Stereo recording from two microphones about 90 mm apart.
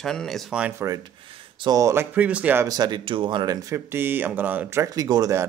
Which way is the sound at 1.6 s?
45° right (ahead or behind).